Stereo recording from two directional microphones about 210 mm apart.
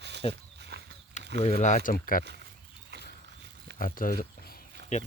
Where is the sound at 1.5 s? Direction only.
40° left (ahead or behind).